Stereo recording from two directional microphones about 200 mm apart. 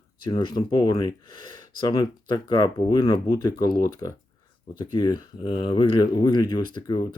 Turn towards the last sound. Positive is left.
turn(degrees=20)  # may be behind; listen again after turning